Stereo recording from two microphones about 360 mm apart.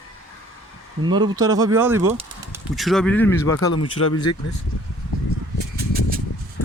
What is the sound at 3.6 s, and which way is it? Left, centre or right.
Speech, left.